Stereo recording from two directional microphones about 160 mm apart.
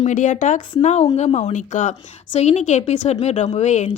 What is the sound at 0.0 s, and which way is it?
A woman's voice, 50° left (ahead or behind).